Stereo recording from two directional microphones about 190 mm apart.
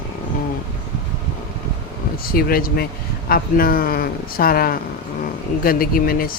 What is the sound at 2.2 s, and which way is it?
Speech, 50° left (ahead or behind).